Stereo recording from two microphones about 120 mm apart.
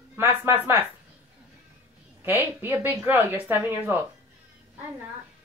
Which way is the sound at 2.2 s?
20° right (ahead or behind).